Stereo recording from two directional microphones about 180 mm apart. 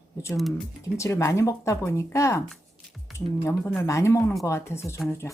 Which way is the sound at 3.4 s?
15° left (ahead or behind).